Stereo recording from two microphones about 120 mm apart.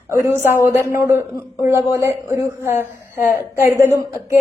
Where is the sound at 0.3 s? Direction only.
20° right (ahead or behind).